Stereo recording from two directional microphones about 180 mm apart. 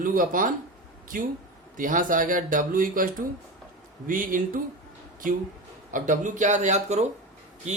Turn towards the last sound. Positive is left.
turn(degrees=-40)  # may be behind; listen again after turning